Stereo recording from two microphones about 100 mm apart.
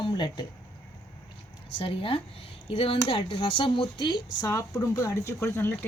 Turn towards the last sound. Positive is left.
turn(degrees=25)  # may be behind; listen again after turning